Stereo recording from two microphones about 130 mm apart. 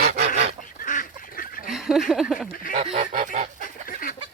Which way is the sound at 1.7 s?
5° right (ahead or behind).